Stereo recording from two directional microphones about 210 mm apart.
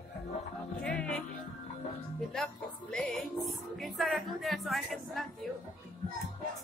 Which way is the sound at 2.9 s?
5° left (ahead or behind).